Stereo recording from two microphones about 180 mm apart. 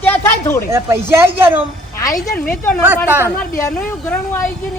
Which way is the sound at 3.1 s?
10° right (ahead or behind).